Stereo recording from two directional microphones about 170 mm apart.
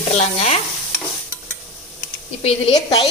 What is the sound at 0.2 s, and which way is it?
Stir, 40° left (ahead or behind).